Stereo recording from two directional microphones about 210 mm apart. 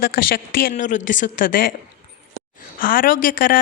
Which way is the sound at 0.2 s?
45° left (ahead or behind).